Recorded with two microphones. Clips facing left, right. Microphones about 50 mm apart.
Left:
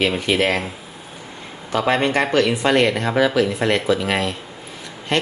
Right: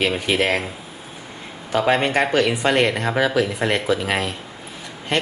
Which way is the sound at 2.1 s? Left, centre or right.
Right.